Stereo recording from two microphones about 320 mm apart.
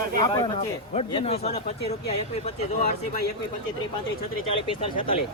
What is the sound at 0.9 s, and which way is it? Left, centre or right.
Speech, centre.